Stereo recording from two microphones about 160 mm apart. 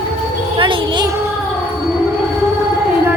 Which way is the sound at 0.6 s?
30° right (ahead or behind).